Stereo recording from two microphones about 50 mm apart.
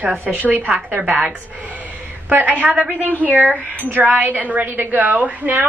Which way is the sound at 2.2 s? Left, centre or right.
Right.